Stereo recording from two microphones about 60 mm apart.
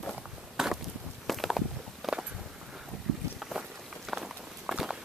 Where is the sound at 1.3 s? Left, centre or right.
Centre.